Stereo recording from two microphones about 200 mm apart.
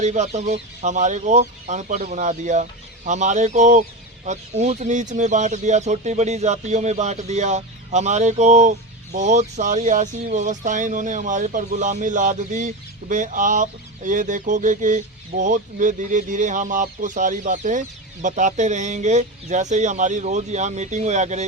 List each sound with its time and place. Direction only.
0.0 s speech: 35° right (ahead or behind)